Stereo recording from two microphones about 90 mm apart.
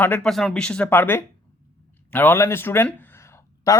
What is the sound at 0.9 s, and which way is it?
Speech, 25° left (ahead or behind).